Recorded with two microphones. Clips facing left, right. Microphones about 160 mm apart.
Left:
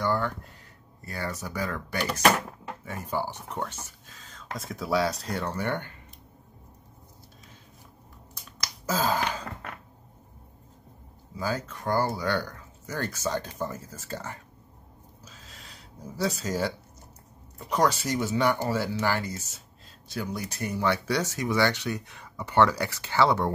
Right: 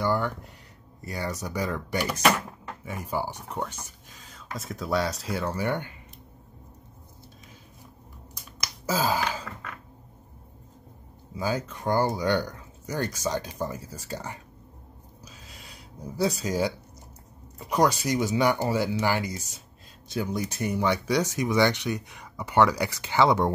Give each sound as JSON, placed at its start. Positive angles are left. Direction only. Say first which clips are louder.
{"t": 0.0, "sound": "a sound", "louder": "right 1 dB", "side_deg": -15}
{"t": 1.0, "sound": "speech", "louder": "right 2 dB", "side_deg": -15}
{"t": 8.5, "sound": "finger snapping", "louder": "right 1 dB", "side_deg": -10}
{"t": 11.3, "sound": "speech", "louder": "right 2 dB", "side_deg": -15}
{"t": 15.2, "sound": "a sound", "louder": "right 2 dB", "side_deg": -10}
{"t": 17.6, "sound": "speech", "louder": "right 2 dB", "side_deg": -10}